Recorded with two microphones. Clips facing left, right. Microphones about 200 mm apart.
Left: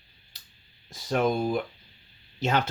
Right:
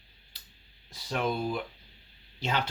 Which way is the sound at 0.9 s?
45° left (ahead or behind).